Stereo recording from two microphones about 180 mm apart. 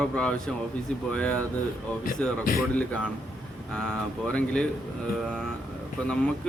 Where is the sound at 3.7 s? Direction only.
5° left (ahead or behind).